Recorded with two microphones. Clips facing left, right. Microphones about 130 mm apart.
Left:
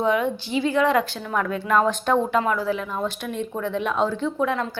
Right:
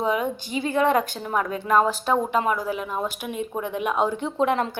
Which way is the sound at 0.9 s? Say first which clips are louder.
Left 1 dB; 20° right (ahead or behind).